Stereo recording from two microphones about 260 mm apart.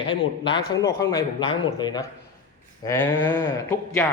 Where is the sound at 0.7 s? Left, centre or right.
Centre.